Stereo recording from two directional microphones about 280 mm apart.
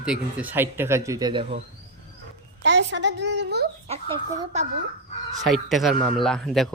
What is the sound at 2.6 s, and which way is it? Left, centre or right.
A child's voice, right.